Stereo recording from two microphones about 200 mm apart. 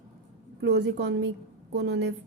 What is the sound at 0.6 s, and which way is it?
A woman's voice, 60° right (ahead or behind).